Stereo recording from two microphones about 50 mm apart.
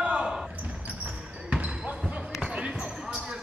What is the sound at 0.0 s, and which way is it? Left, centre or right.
Basketball bounce, right.